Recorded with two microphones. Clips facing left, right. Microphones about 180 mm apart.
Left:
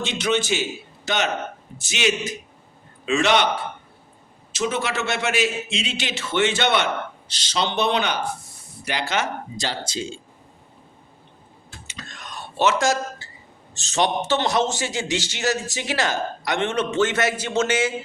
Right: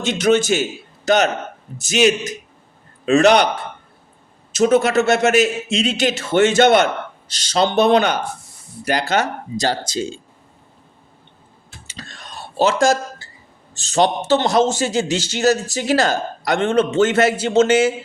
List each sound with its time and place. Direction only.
0.0 s a man's voice: 45° right (ahead or behind)
4.5 s a man's voice: 40° right (ahead or behind)
11.9 s a sound: 35° right (ahead or behind)
13.8 s a man's voice: 30° right (ahead or behind)